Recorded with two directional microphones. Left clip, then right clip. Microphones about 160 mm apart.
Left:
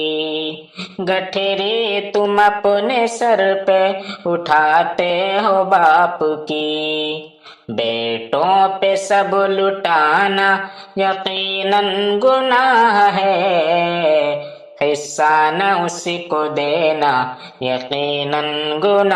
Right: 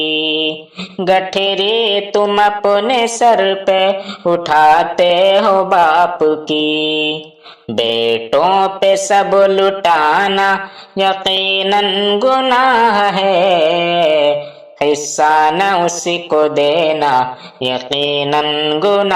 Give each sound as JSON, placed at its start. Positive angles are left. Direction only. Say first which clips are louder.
{"t": 1.0, "sound": "mantra", "louder": "right 5 dB", "side_deg": -40}